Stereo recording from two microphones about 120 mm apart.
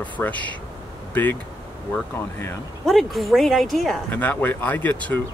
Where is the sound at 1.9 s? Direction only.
20° left (ahead or behind).